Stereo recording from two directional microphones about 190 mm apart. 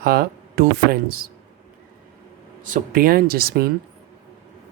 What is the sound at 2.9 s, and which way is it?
Speech, 50° right (ahead or behind).